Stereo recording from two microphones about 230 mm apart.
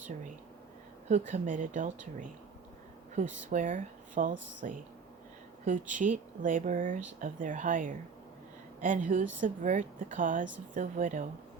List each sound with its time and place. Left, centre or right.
1.1 s speech: right
3.5 s speech: right
5.9 s speech: right